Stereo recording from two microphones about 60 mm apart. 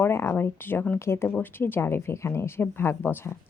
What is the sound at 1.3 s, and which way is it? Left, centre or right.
A woman's voice, left.